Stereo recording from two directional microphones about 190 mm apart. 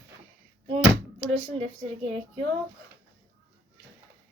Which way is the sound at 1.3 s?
35° right (ahead or behind).